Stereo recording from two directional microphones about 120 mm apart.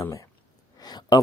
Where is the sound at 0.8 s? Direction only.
35° left (ahead or behind).